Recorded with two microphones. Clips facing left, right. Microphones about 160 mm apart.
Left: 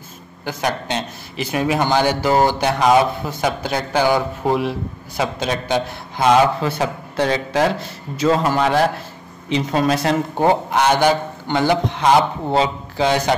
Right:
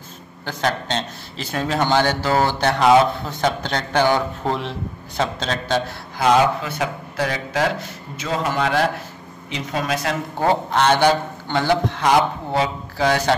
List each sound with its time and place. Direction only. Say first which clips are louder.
0.5 s a man's voice: left 1 dB; 10° left (ahead or behind)
6.6 s a man's voice: left 4 dB; 30° left (ahead or behind)
10.4 s a man's voice: left 1 dB; 15° left (ahead or behind)